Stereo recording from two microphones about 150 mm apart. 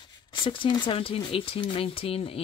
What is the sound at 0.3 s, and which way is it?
Speech, 35° left (ahead or behind).